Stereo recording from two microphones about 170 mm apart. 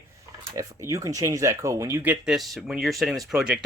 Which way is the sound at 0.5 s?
20° right (ahead or behind).